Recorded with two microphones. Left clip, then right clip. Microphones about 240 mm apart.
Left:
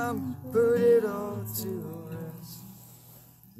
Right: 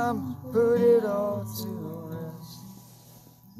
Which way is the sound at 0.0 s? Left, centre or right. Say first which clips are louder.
Right 3 dB; left.